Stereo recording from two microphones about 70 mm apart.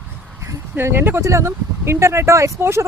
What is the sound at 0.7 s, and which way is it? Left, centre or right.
Speech, right.